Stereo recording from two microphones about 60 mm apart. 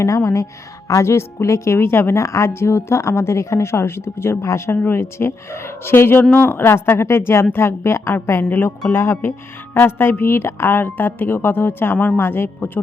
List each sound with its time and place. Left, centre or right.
0.9 s a woman's voice: left
8.4 s a woman's voice: left
8.9 s a woman's voice: left
11.9 s a woman's voice: left
12.2 s a woman's voice: left